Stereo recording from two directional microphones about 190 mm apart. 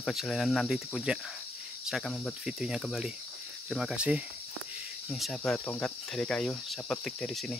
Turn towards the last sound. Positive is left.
turn(degrees=0)  # may be behind; listen again after turning